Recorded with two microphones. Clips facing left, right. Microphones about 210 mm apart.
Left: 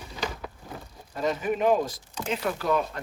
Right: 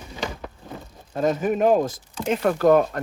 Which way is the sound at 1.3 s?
45° right (ahead or behind).